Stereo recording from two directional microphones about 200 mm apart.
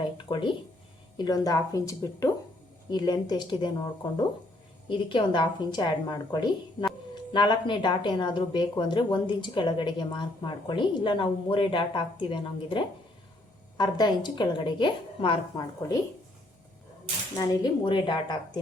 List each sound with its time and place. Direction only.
0.0 s speech: 25° left (ahead or behind)
17.3 s speech: 20° left (ahead or behind)